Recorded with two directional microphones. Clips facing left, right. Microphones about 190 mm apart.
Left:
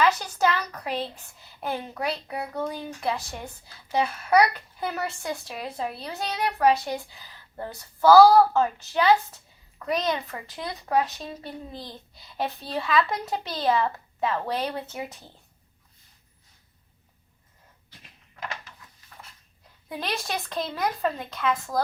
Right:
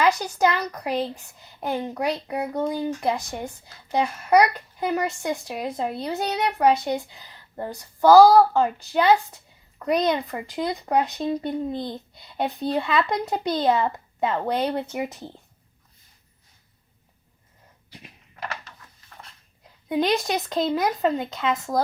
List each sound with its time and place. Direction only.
0.0 s a child's voice: 15° right (ahead or behind)
20.1 s speech: 20° right (ahead or behind)